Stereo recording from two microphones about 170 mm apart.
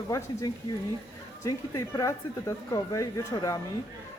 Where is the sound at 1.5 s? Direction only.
20° left (ahead or behind).